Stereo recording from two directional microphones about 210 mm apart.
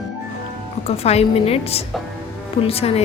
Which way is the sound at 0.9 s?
30° left (ahead or behind).